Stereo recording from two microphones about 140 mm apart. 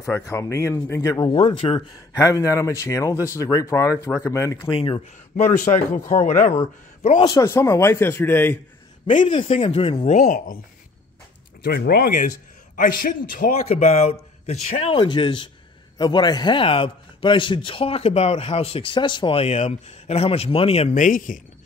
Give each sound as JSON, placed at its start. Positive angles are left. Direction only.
{"t": 0.0, "sound": "speech", "side_deg": 20}
{"t": 1.3, "sound": "a man's voice", "side_deg": 40}
{"t": 2.1, "sound": "speech", "side_deg": 25}
{"t": 4.7, "sound": "a man's voice", "side_deg": 35}
{"t": 5.3, "sound": "speech", "side_deg": 65}
{"t": 6.5, "sound": "speech", "side_deg": 45}
{"t": 7.2, "sound": "speech", "side_deg": 25}
{"t": 9.2, "sound": "a man's voice", "side_deg": 35}
{"t": 10.0, "sound": "speech", "side_deg": 65}
{"t": 11.6, "sound": "a man's voice", "side_deg": 90}
{"t": 13.7, "sound": "a man's voice", "side_deg": 50}
{"t": 20.9, "sound": "speech", "side_deg": 70}